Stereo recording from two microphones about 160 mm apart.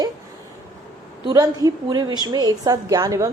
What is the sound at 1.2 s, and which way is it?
A woman's voice, 20° right (ahead or behind).